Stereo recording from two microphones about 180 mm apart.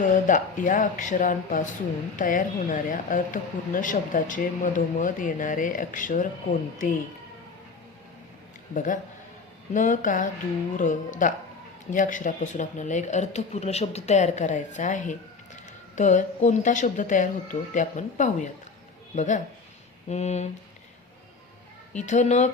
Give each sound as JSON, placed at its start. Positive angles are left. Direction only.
{"t": 0.0, "sound": "speech", "side_deg": 45}
{"t": 8.7, "sound": "speech", "side_deg": 45}
{"t": 21.9, "sound": "speech", "side_deg": 40}